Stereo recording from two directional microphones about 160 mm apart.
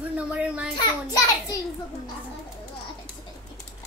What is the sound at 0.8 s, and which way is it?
Speech, 20° left (ahead or behind).